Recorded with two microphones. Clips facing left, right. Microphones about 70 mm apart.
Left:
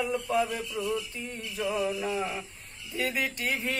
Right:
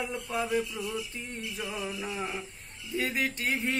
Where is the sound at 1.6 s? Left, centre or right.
Left.